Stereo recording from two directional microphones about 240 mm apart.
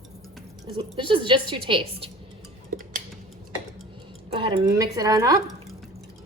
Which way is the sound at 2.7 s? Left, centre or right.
Right.